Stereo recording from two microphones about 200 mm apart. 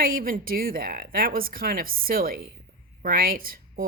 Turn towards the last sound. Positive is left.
turn(degrees=-45)  # may be behind; listen again after turning